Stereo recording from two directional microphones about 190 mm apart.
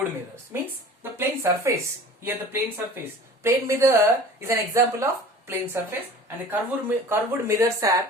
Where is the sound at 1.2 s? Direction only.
15° right (ahead or behind).